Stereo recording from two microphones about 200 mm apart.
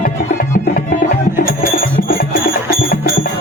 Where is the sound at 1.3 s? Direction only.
45° left (ahead or behind).